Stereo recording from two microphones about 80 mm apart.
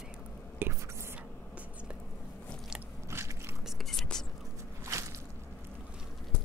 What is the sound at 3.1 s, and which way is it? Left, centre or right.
Biting, right.